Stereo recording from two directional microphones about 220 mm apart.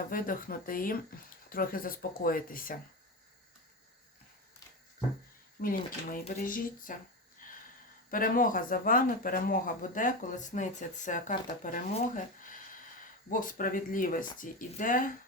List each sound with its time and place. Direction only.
0.0 s speech: 40° left (ahead or behind)
5.6 s speech: 40° left (ahead or behind)
7.4 s a sound: 40° left (ahead or behind)
8.1 s speech: 40° left (ahead or behind)